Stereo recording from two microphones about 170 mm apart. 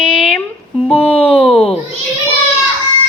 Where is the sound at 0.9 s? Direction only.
5° left (ahead or behind).